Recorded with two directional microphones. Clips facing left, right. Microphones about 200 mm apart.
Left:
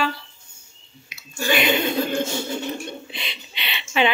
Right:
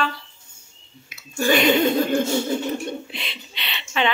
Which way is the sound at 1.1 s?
50° right (ahead or behind).